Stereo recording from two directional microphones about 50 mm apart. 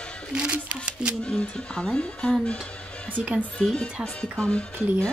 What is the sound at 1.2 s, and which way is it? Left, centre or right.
Speech, left.